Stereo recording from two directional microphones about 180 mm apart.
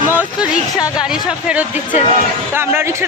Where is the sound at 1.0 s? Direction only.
5° right (ahead or behind).